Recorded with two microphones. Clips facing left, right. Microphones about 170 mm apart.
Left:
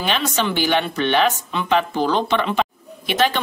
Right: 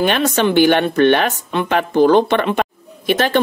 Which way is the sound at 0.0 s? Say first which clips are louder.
Right 6 dB; 55° right (ahead or behind).